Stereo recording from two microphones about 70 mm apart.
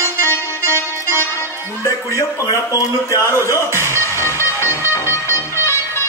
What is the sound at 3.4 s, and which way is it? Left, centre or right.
Music, left.